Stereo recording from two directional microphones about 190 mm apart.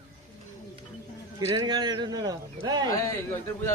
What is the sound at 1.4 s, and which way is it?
Speech, 25° right (ahead or behind).